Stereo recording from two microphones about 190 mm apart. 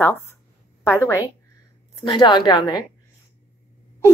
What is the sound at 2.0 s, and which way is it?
Speech, 25° left (ahead or behind).